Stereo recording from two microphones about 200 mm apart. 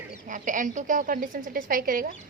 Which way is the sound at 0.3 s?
40° right (ahead or behind).